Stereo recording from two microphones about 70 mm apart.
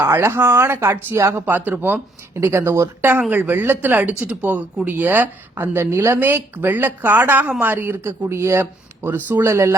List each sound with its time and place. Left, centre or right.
0.0 s speech: right
2.3 s speech: right
3.0 s speech: right
9.5 s speech: right